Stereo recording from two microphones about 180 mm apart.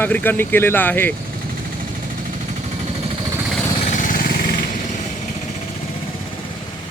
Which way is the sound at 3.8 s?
45° left (ahead or behind).